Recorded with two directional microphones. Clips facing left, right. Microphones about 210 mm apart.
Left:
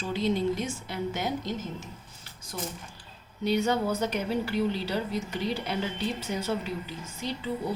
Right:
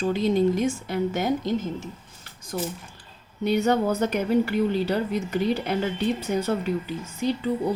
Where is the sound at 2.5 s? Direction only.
45° right (ahead or behind).